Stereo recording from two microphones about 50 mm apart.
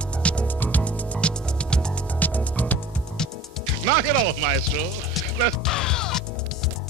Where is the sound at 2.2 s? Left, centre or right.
Left.